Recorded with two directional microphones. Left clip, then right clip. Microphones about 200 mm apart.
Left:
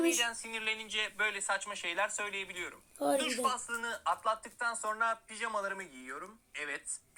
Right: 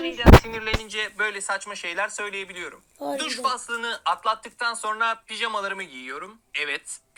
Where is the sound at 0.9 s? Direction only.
55° right (ahead or behind).